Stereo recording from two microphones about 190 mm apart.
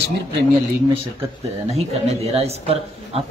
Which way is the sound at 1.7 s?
35° right (ahead or behind).